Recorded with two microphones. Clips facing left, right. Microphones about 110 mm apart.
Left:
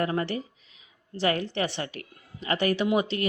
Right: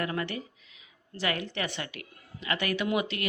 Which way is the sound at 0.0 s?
35° left (ahead or behind).